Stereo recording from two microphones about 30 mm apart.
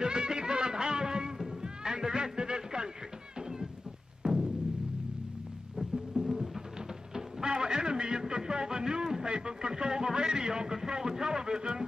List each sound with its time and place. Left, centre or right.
0.0 s music: right
1.6 s cat: right
3.3 s a sound: centre
4.2 s music: right
6.2 s music: centre
7.4 s a sound: right